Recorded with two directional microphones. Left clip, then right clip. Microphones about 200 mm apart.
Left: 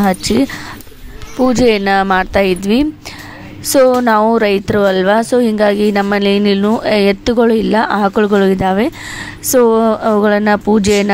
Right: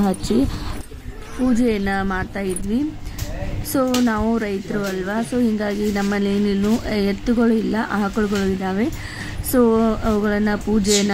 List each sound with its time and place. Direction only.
1.5 s a woman's voice: 40° left (ahead or behind)